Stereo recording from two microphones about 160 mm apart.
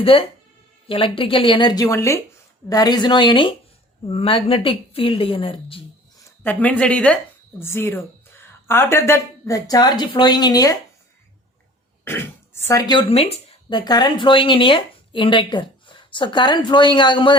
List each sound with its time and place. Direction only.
0.0 s a woman's voice: 35° left (ahead or behind)
6.4 s a woman's voice: 10° left (ahead or behind)
12.0 s throat clearing: 15° left (ahead or behind)
12.9 s speech: 35° left (ahead or behind)